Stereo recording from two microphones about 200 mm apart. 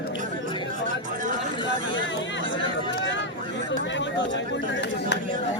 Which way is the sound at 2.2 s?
65° left (ahead or behind).